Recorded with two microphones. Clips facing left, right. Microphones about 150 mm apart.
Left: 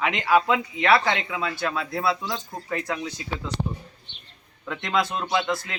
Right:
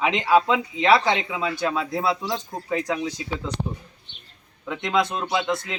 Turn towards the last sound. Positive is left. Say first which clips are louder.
# right 1 dB
turn(degrees=-20)  # may be behind; listen again after turning